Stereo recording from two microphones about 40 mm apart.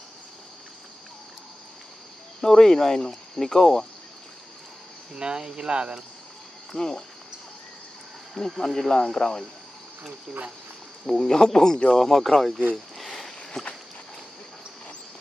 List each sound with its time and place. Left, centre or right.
2.4 s speech: centre
5.1 s speech: centre
6.7 s speech: centre
8.5 s speech: centre
11.1 s speech: centre
12.7 s a sound: centre
13.5 s walk: centre